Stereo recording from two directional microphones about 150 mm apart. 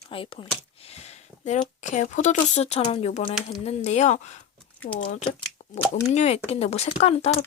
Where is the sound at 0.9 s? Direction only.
50° left (ahead or behind).